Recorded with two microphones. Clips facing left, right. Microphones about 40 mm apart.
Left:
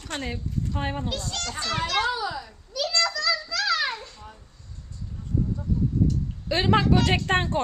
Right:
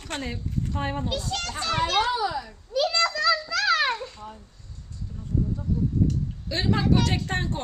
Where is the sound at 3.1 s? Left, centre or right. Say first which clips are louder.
Right 3 dB; right.